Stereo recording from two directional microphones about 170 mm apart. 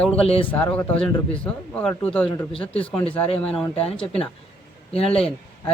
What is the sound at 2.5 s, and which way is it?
Speech, 35° left (ahead or behind).